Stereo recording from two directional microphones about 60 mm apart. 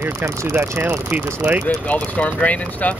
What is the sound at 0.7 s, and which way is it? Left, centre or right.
Speech, right.